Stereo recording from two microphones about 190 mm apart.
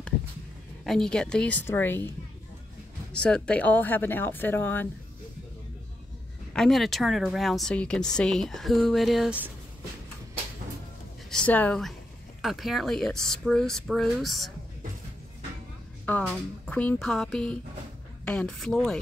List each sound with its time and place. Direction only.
0.8 s speech: 5° left (ahead or behind)
3.1 s speech: 5° left (ahead or behind)
6.5 s speech: centre (ahead or behind)
11.2 s speech: 5° left (ahead or behind)
16.6 s speech: 5° left (ahead or behind)